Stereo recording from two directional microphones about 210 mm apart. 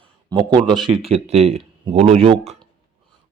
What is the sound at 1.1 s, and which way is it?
Speech, 30° right (ahead or behind).